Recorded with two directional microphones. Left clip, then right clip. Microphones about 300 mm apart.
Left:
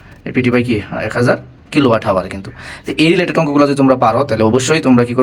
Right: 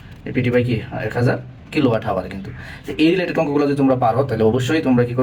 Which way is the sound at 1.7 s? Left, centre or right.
Left.